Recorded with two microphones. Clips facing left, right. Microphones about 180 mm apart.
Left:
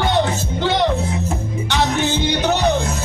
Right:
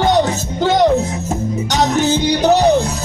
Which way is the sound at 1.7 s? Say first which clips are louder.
Right 4 dB; 40° right (ahead or behind).